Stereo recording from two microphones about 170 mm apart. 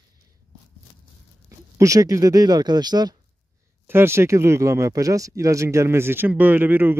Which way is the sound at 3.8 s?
15° right (ahead or behind).